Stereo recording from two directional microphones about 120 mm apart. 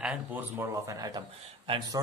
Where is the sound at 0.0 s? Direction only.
10° right (ahead or behind).